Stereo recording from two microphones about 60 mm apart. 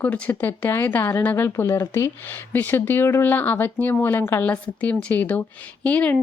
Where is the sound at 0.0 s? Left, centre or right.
Left.